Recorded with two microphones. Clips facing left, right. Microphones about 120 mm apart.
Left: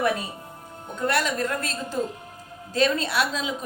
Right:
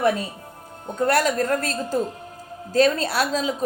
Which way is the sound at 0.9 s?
40° right (ahead or behind).